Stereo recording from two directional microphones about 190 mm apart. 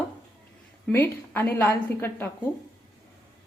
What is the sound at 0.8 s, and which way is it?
A woman's voice, 10° left (ahead or behind).